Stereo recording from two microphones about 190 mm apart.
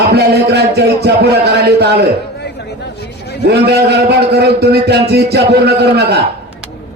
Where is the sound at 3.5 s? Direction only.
55° right (ahead or behind).